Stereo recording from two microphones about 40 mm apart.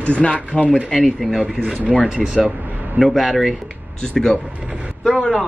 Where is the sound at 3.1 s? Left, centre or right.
Centre.